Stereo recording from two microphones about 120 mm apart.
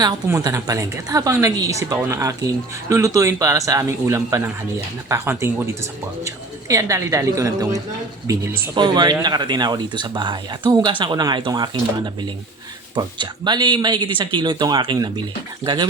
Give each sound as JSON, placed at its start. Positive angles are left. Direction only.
{"t": 0.4, "sound": "a woman's voice", "side_deg": -25}
{"t": 8.7, "sound": "speech", "side_deg": -40}
{"t": 13.0, "sound": "speech", "side_deg": -35}